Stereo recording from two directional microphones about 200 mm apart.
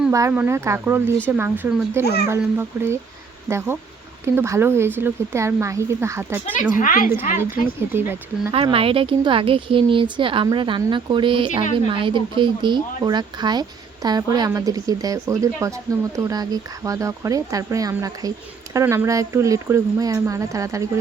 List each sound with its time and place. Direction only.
0.1 s speech: 15° right (ahead or behind)
2.0 s a child's voice: 55° left (ahead or behind)
2.3 s speech: 10° right (ahead or behind)
4.4 s speech: 10° right (ahead or behind)
6.6 s a woman's voice: 40° left (ahead or behind)
7.1 s speech: 10° right (ahead or behind)
8.5 s speech: 30° right (ahead or behind)